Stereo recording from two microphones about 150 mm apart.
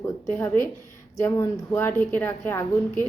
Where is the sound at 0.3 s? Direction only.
15° left (ahead or behind).